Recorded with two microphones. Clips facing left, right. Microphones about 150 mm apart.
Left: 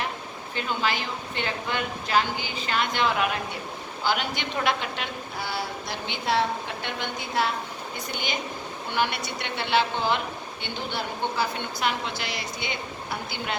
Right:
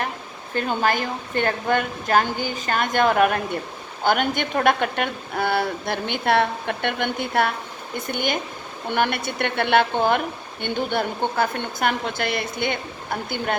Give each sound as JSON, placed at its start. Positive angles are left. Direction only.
{"t": 0.5, "sound": "a woman's voice", "side_deg": -50}